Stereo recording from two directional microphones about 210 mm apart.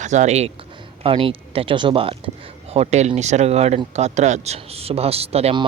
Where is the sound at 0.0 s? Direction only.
35° right (ahead or behind).